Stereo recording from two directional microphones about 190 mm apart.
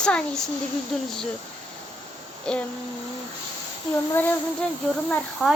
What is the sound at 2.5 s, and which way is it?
Speech, 5° left (ahead or behind).